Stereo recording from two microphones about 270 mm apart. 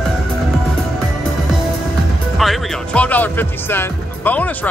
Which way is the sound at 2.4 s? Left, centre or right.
Centre.